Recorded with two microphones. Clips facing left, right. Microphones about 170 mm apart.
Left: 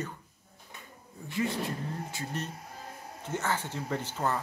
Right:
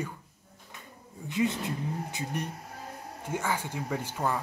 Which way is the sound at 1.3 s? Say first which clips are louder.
Right 3 dB; 20° right (ahead or behind).